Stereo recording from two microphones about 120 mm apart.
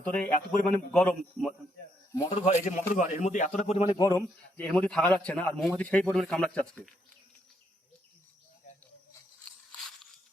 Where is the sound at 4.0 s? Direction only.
25° left (ahead or behind).